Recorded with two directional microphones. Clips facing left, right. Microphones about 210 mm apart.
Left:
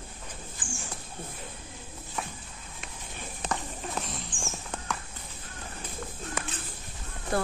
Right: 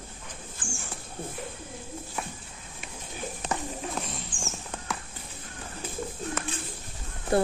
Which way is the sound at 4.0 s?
Centre (ahead or behind).